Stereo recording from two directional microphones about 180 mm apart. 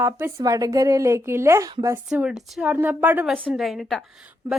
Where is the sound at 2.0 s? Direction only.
5° right (ahead or behind).